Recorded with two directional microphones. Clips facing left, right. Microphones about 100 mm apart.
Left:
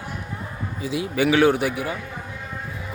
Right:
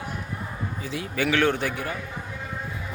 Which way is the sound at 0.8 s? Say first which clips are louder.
Left 6 dB; 15° left (ahead or behind).